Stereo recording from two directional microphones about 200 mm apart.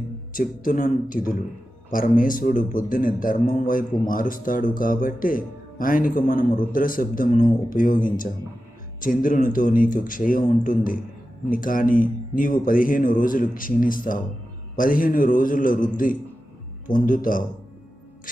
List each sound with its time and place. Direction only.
0.3 s a man's voice: 40° left (ahead or behind)